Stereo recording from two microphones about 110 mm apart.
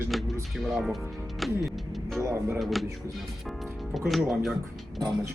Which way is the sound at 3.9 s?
Centre (ahead or behind).